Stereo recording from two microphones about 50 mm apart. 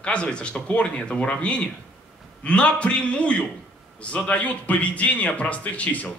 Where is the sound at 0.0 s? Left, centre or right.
Left.